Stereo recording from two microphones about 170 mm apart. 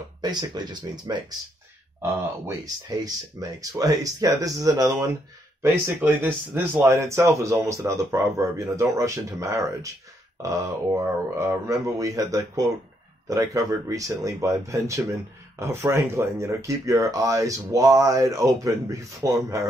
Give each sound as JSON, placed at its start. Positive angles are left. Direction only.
{"t": 0.2, "sound": "speech", "side_deg": -25}